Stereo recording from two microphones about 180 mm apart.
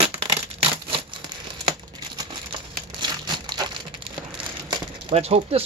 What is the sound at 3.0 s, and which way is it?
Crumpling, 25° right (ahead or behind).